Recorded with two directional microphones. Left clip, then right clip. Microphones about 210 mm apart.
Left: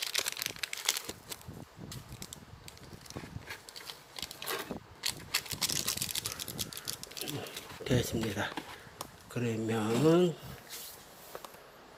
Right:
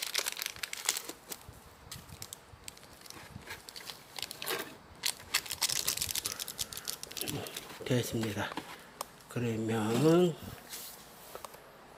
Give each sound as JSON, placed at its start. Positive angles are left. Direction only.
{"t": 0.0, "sound": "crumpling", "side_deg": -5}
{"t": 3.8, "sound": "a sound", "side_deg": -10}
{"t": 9.3, "sound": "speech", "side_deg": 5}